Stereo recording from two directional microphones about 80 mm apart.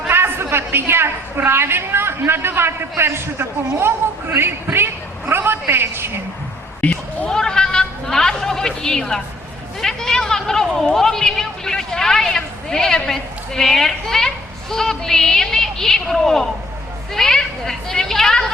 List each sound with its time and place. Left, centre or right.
0.1 s a woman's voice: right
6.8 s bleat: centre
9.8 s a child's voice: centre